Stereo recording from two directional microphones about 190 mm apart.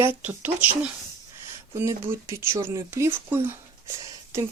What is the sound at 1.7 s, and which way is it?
Speech, 15° right (ahead or behind).